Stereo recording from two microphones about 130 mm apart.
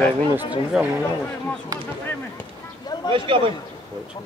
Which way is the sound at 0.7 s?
5° right (ahead or behind).